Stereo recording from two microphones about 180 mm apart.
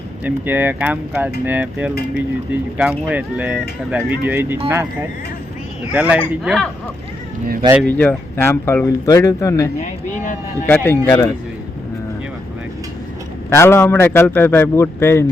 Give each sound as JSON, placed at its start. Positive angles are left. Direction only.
{"t": 0.3, "sound": "speech", "side_deg": -10}
{"t": 5.9, "sound": "speech", "side_deg": -10}
{"t": 7.9, "sound": "speech", "side_deg": 10}
{"t": 9.8, "sound": "speech", "side_deg": 45}
{"t": 10.7, "sound": "speech", "side_deg": 10}
{"t": 13.5, "sound": "speech", "side_deg": 15}